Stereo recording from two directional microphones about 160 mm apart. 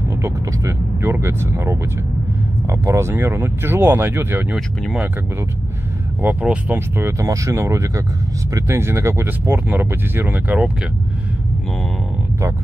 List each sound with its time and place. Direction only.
0.2 s speech: 20° right (ahead or behind)
6.2 s speech: 10° right (ahead or behind)